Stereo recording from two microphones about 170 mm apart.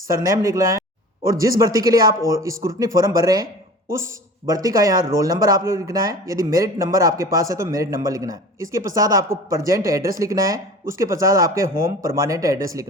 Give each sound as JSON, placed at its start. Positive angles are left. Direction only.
{"t": 0.1, "sound": "speech", "side_deg": -20}